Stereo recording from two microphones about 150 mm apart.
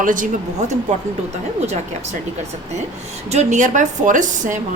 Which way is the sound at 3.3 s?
50° right (ahead or behind).